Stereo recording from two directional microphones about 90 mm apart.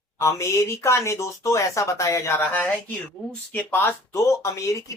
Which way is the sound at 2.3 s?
20° left (ahead or behind).